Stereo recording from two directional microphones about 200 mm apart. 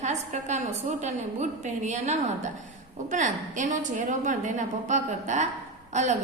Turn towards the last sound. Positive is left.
turn(degrees=-35)  # may be behind; listen again after turning